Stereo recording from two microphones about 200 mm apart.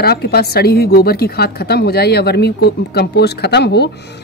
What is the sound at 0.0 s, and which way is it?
A woman's voice, 50° left (ahead or behind).